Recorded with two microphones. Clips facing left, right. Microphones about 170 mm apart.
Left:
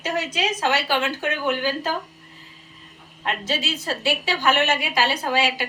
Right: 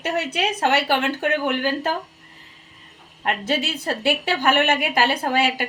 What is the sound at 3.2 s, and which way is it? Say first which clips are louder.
A woman's voice: right 3 dB; 55° right (ahead or behind).